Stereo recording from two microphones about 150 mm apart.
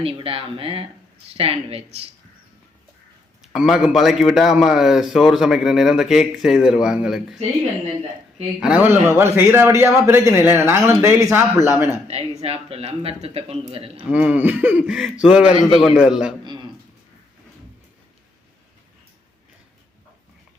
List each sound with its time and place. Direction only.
0.0 s speech: 35° right (ahead or behind)
3.4 s a man's voice: centre (ahead or behind)
8.6 s a man's voice: 10° right (ahead or behind)
12.4 s speech: 40° right (ahead or behind)
14.1 s a man's voice: 10° right (ahead or behind)
16.4 s a sound: 30° right (ahead or behind)